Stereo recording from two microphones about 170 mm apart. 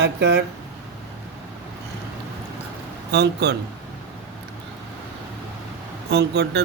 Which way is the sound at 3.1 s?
75° right (ahead or behind).